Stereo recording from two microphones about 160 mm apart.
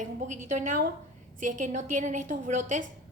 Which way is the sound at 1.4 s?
55° right (ahead or behind).